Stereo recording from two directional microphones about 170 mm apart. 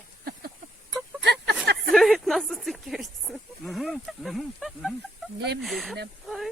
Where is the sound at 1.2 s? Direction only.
75° right (ahead or behind).